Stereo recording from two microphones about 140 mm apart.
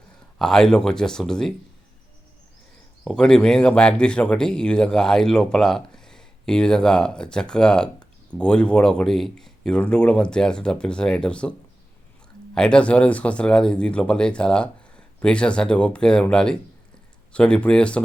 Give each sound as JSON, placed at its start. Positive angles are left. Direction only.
{"t": 0.3, "sound": "speech", "side_deg": 5}
{"t": 3.0, "sound": "speech", "side_deg": 5}
{"t": 12.5, "sound": "speech", "side_deg": 5}